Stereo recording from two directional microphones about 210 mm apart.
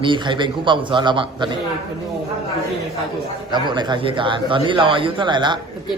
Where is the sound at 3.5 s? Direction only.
20° right (ahead or behind).